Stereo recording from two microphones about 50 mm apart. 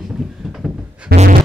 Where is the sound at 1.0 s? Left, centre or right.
Right.